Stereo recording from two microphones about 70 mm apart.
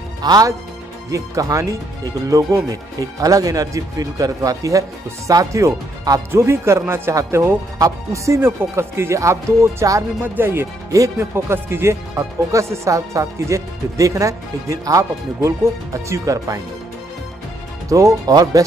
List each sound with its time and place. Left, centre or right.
0.2 s speech: right
1.1 s speech: right
6.3 s speech: right
8.4 s speech: right
10.2 s speech: right
10.9 s speech: right
17.8 s speech: right